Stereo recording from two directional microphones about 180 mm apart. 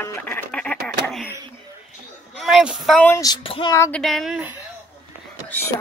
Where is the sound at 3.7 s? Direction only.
15° left (ahead or behind).